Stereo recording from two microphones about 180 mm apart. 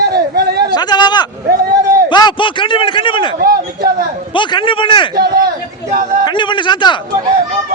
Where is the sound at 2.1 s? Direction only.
25° left (ahead or behind).